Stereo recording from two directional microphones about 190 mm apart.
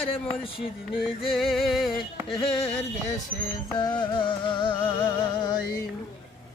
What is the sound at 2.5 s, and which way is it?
Speech, 30° left (ahead or behind).